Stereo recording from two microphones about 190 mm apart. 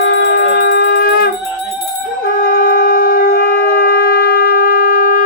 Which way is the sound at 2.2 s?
50° left (ahead or behind).